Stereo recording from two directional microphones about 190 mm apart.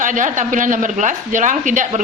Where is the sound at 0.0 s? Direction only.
40° right (ahead or behind).